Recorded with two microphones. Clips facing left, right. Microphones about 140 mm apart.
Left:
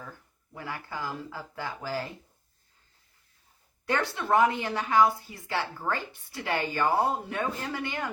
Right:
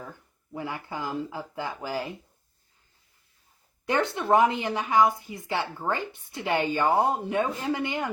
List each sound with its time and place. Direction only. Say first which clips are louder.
0.5 s a woman's voice: right 4 dB; 20° right (ahead or behind)
3.8 s a woman's voice: right 3 dB; 20° right (ahead or behind)